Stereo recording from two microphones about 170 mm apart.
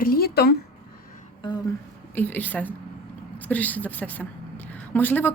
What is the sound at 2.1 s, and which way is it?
A woman's voice, 10° left (ahead or behind).